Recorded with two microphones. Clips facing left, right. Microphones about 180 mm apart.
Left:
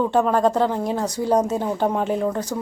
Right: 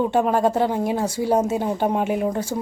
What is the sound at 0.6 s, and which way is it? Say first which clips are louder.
A woman's voice: even; 10° right (ahead or behind).